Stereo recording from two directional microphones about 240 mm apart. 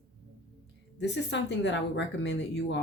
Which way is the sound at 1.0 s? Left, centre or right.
Left.